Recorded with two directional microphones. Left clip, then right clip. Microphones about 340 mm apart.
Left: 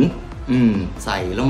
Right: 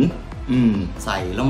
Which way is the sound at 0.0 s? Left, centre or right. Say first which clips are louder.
Left 2 dB; centre.